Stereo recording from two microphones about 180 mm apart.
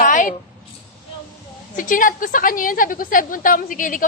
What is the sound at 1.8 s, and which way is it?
A woman's voice, 50° left (ahead or behind).